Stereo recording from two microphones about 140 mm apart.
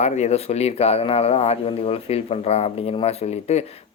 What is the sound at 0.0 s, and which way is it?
Speech, 50° left (ahead or behind).